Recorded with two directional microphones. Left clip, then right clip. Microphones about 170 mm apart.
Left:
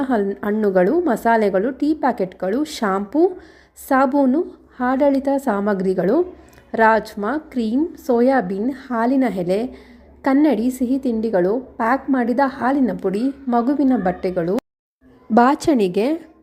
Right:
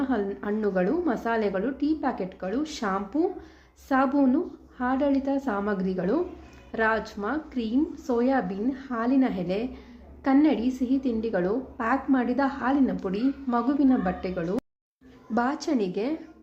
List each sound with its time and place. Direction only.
0.0 s a woman's voice: 45° left (ahead or behind)